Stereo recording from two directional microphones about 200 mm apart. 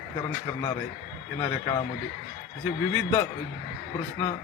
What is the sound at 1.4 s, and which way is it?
Speech, 15° left (ahead or behind).